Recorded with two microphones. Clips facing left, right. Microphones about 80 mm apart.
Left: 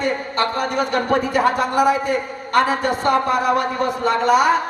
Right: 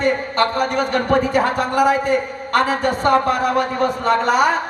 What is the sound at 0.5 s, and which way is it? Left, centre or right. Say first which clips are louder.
A man's voice: right 1 dB; right.